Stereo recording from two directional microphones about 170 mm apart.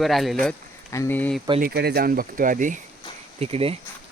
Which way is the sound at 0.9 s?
10° left (ahead or behind).